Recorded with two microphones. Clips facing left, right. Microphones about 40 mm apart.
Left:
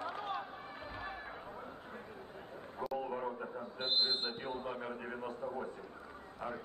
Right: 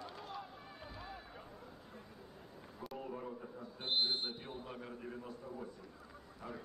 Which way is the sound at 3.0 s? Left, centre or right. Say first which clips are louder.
Left 6 dB; left.